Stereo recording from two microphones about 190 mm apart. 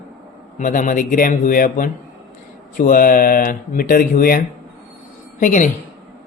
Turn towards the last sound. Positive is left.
turn(degrees=45)  # may be behind; listen again after turning